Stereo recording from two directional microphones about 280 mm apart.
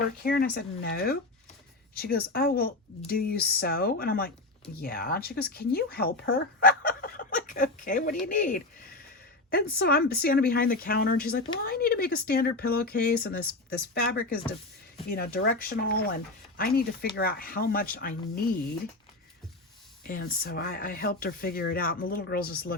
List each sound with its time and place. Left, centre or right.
0.2 s speech: left
20.4 s speech: left